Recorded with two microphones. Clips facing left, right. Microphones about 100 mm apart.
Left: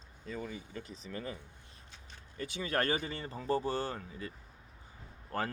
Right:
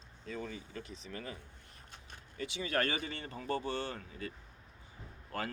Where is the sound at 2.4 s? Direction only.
45° left (ahead or behind).